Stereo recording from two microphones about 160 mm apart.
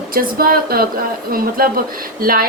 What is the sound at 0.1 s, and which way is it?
A woman's voice, 65° right (ahead or behind).